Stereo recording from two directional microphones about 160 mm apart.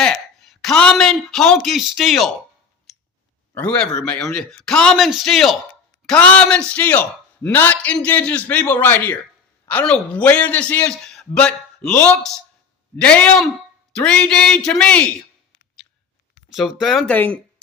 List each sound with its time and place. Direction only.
0.0 s speech: 5° left (ahead or behind)
3.5 s a man's voice: 5° left (ahead or behind)
16.5 s speech: centre (ahead or behind)
17.2 s a man's voice: 10° left (ahead or behind)